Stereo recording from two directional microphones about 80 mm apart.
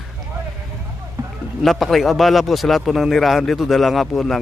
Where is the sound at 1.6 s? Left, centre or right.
Centre.